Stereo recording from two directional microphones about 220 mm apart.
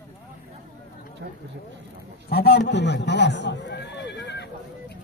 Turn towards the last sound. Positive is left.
turn(degrees=50)  # may be behind; listen again after turning